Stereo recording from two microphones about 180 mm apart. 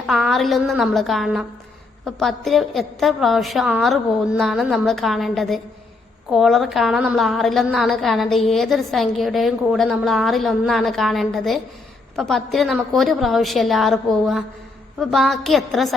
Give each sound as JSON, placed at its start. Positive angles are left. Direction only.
{"t": 0.1, "sound": "a woman's voice", "side_deg": 0}